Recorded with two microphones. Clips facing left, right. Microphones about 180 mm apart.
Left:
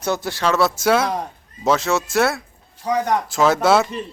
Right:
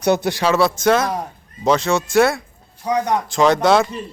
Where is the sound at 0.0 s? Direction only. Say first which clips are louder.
Right 4 dB; 20° right (ahead or behind).